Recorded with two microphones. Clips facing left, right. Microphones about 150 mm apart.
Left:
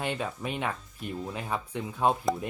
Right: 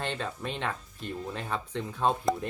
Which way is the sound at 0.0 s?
10° left (ahead or behind).